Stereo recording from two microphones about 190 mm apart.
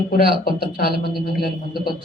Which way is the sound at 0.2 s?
50° left (ahead or behind).